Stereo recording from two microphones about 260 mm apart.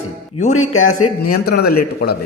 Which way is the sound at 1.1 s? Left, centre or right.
Left.